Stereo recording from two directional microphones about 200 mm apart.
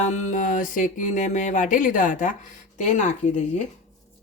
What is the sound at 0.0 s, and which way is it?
Music, 35° left (ahead or behind).